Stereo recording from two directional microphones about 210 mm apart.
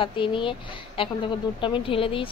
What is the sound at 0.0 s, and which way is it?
Speech, 25° left (ahead or behind).